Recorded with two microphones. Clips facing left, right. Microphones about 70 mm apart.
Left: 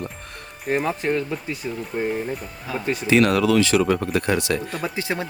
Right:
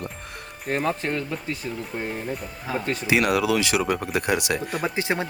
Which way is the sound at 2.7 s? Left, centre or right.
Right.